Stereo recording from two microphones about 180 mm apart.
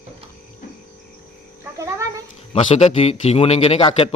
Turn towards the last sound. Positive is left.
turn(degrees=30)  # may be behind; listen again after turning